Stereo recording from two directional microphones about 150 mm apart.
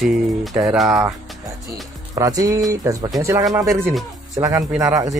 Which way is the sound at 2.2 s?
25° right (ahead or behind).